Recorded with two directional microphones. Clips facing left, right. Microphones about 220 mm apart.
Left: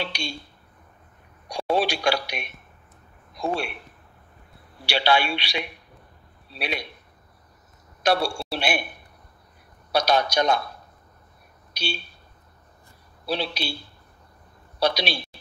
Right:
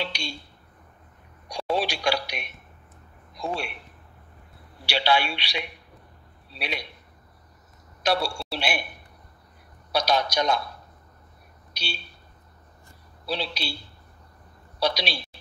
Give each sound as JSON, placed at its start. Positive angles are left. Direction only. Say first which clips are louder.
{"t": 0.0, "sound": "a sound", "louder": "left 1 dB", "side_deg": 50}
{"t": 1.5, "sound": "speech", "louder": "left 3 dB", "side_deg": 50}
{"t": 4.8, "sound": "speech", "louder": "left 2 dB", "side_deg": 50}
{"t": 8.0, "sound": "a man's voice", "louder": "left 3 dB", "side_deg": 50}
{"t": 9.9, "sound": "speech", "louder": "left 3 dB", "side_deg": 55}
{"t": 11.7, "sound": "a sound", "louder": "left 6 dB", "side_deg": 50}
{"t": 13.3, "sound": "speech", "louder": "left 3 dB", "side_deg": 50}
{"t": 14.8, "sound": "speech", "louder": "left 3 dB", "side_deg": 55}